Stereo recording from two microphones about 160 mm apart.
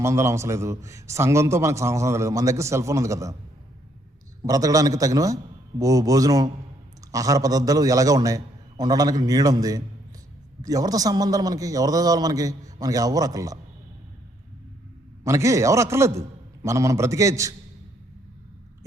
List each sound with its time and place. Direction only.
0.0 s a man's voice: 15° right (ahead or behind)
4.4 s a man's voice: 20° right (ahead or behind)
15.2 s a man's voice: 20° right (ahead or behind)